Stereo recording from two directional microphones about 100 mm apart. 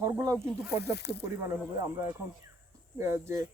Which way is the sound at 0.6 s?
15° right (ahead or behind).